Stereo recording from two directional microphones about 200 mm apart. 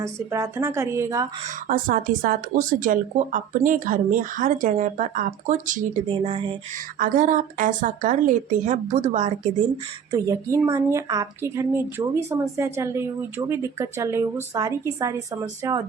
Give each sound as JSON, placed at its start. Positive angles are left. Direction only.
{"t": 0.0, "sound": "a woman's voice", "side_deg": -15}
{"t": 1.6, "sound": "speech", "side_deg": -45}
{"t": 6.1, "sound": "speech", "side_deg": -25}
{"t": 7.0, "sound": "speech", "side_deg": -40}
{"t": 10.1, "sound": "a woman's voice", "side_deg": -20}